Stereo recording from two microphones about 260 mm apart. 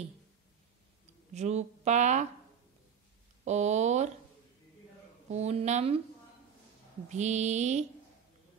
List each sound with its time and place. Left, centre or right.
1.3 s speech: right
3.4 s speech: right
5.3 s speech: right
7.1 s speech: right